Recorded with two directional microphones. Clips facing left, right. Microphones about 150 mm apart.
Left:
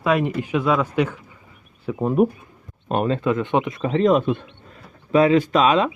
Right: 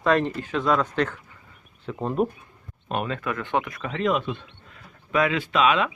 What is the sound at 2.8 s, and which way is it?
Speech, 35° left (ahead or behind).